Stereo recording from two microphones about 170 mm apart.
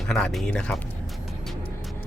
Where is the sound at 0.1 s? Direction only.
Centre (ahead or behind).